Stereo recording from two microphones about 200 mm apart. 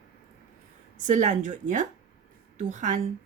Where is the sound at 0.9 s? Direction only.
40° right (ahead or behind).